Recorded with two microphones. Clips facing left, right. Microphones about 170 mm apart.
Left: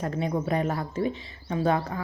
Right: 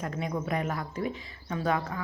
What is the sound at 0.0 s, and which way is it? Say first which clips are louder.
Speech: left 5 dB; 30° left (ahead or behind).